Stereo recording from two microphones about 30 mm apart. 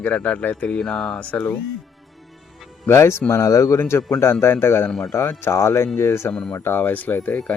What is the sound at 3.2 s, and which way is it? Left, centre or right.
Speech, left.